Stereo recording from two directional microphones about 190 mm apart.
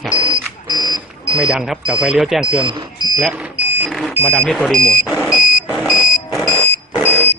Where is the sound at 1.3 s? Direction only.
5° right (ahead or behind).